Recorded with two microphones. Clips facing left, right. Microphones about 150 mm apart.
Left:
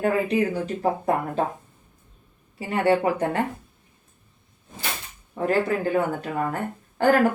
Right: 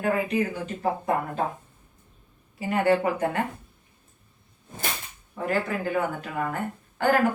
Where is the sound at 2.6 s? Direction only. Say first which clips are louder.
Left 1 dB; 30° left (ahead or behind).